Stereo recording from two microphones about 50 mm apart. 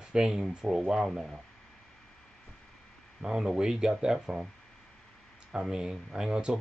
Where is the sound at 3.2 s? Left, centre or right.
Centre.